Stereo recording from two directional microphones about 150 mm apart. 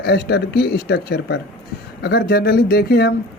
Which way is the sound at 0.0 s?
90° left.